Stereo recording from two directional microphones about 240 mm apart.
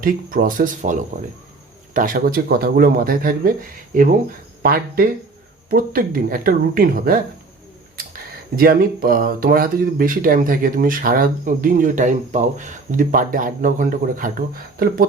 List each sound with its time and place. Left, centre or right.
0.0 s speech: right